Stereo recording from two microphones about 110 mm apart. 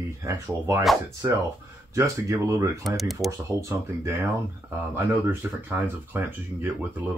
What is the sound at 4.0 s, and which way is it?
Speech, 25° right (ahead or behind).